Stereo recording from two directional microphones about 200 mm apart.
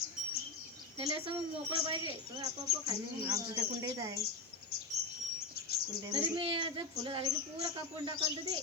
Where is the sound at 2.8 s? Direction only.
20° right (ahead or behind).